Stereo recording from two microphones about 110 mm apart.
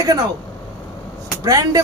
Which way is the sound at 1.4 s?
35° right (ahead or behind).